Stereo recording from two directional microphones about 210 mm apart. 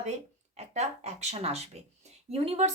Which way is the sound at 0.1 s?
30° right (ahead or behind).